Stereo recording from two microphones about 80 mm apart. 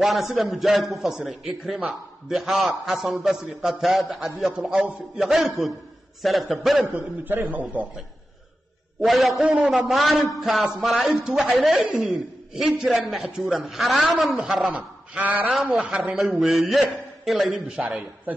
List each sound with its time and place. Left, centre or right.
0.0 s a man's voice: centre
6.9 s a man's voice: right
9.0 s a man's voice: centre
9.4 s a man's voice: centre
9.7 s a man's voice: centre; by 15.5 s right
15.5 s a man's voice: centre